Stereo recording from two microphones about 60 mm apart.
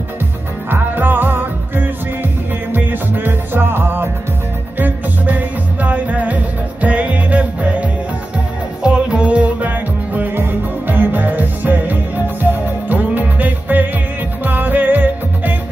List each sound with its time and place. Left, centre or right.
0.7 s music: right
8.8 s music: centre